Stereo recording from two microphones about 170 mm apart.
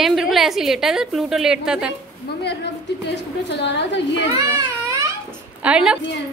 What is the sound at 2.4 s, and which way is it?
A woman's voice, 80° left.